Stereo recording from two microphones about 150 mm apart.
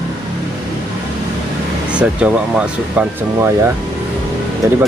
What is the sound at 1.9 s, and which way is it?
Speech, 5° right (ahead or behind).